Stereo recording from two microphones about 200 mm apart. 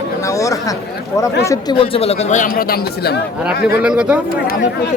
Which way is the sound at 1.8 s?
30° left (ahead or behind).